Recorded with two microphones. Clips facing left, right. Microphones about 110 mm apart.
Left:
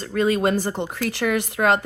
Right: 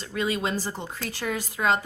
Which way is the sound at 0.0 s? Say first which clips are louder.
Left 7 dB; 45° left (ahead or behind).